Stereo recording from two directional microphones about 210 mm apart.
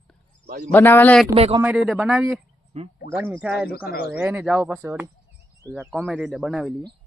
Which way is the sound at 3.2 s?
10° right (ahead or behind).